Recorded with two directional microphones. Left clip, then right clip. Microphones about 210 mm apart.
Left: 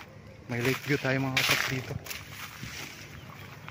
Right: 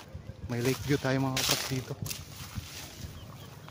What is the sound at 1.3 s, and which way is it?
Speech, 5° right (ahead or behind).